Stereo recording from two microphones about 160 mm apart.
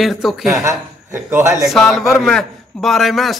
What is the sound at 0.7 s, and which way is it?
Speech, 15° right (ahead or behind).